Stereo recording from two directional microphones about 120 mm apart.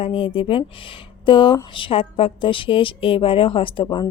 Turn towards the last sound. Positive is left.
turn(degrees=40)  # may be behind; listen again after turning